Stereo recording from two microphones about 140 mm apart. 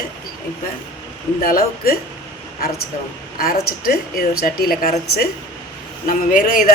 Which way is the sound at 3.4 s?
90° left.